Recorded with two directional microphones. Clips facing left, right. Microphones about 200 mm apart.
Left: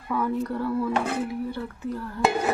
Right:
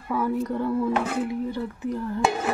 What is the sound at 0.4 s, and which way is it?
Speech, 20° right (ahead or behind).